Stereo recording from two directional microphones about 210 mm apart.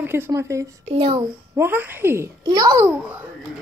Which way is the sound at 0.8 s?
25° right (ahead or behind).